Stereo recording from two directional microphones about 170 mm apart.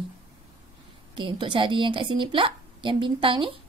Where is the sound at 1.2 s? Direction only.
30° right (ahead or behind).